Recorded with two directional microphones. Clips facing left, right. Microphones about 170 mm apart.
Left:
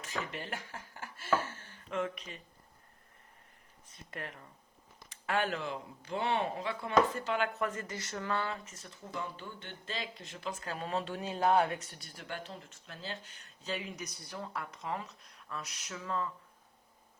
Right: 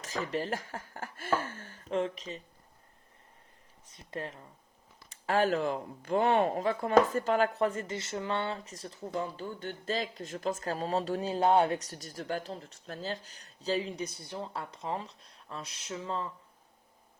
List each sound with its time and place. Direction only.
0.0 s speech: 40° right (ahead or behind)
1.9 s speech: 30° right (ahead or behind)
4.1 s speech: 30° right (ahead or behind)
11.8 s speech: 40° right (ahead or behind)